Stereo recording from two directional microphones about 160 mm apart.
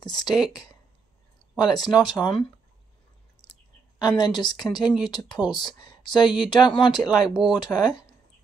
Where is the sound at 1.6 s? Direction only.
25° left (ahead or behind).